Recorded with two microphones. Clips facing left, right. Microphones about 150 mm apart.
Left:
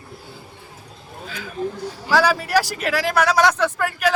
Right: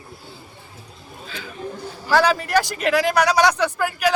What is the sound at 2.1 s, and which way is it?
Speech, 5° left (ahead or behind).